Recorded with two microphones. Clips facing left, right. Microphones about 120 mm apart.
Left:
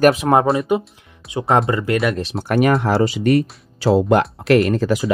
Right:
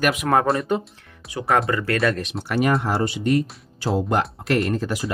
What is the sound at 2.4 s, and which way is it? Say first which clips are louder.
Speech: left 5 dB; 60° left (ahead or behind).